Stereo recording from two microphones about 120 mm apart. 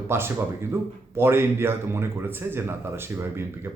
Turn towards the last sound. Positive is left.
turn(degrees=-20)  # may be behind; listen again after turning